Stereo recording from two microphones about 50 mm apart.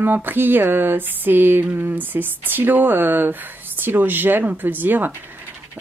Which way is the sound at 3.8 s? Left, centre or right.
Right.